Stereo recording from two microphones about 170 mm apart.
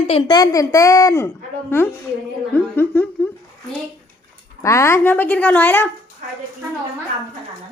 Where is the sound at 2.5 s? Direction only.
10° left (ahead or behind).